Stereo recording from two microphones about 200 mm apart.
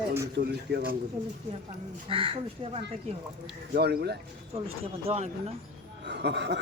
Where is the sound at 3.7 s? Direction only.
55° right (ahead or behind).